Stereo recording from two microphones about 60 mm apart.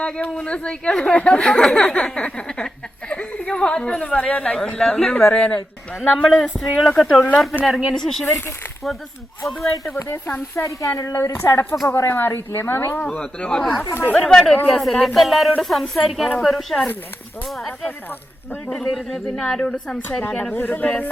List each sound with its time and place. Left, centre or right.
0.0 s speech: centre
3.1 s a sound: centre
4.2 s a woman's voice: left
6.2 s speech: centre
9.4 s speech: centre
10.5 s speech: left
11.3 s a woman's voice: left
11.9 s a woman's voice: left
13.0 s speech: left
14.1 s a woman's voice: left
14.7 s speech: centre
18.9 s speech: centre
20.6 s a woman's voice: left